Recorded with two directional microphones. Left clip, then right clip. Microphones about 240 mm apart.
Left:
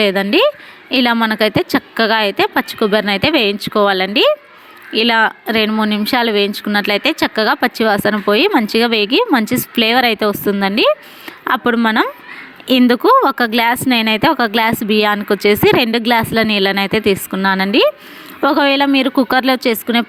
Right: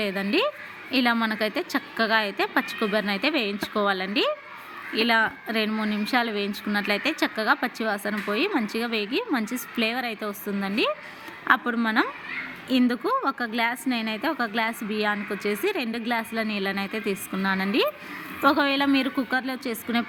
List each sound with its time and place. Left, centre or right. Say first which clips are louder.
0.0 s speech: left 12 dB; left